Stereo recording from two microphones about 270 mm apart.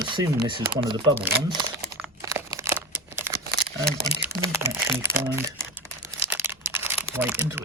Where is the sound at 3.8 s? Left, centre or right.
Centre.